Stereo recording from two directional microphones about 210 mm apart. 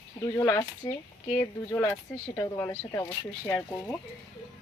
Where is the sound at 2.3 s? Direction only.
15° left (ahead or behind).